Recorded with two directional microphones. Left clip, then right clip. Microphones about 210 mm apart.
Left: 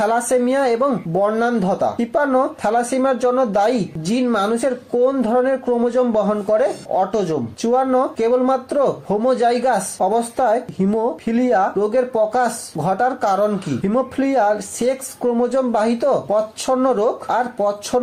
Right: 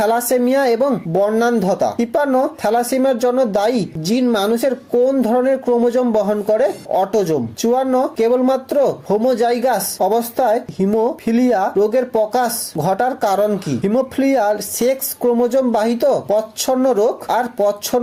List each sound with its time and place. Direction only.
0.0 s speech: 40° right (ahead or behind)